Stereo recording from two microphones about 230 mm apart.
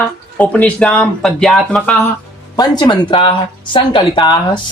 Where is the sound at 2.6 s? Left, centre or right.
Centre.